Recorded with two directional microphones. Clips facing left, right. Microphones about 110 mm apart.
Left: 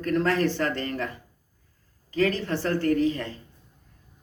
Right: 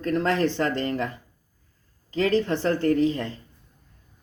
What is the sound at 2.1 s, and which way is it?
Speech, 25° right (ahead or behind).